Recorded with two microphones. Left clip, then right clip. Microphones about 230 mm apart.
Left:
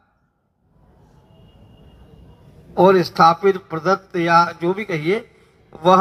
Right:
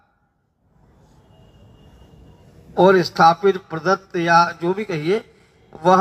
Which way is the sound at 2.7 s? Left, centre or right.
Left.